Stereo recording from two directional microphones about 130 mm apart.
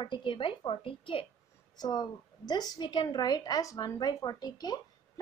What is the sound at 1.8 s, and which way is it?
A woman's voice, 30° left (ahead or behind).